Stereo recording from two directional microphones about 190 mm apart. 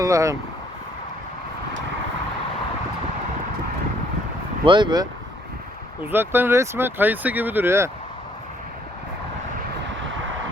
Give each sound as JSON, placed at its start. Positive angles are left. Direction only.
{"t": 0.0, "sound": "speech", "side_deg": -15}
{"t": 4.6, "sound": "speech", "side_deg": -25}
{"t": 6.0, "sound": "speech", "side_deg": -10}